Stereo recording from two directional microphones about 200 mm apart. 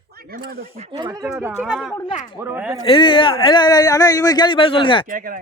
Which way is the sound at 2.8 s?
25° left (ahead or behind).